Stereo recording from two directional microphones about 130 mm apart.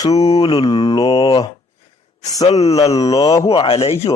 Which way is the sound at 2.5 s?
50° left (ahead or behind).